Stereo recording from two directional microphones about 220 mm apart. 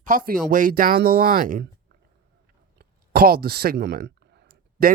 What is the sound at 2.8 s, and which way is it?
Speech, 45° right (ahead or behind).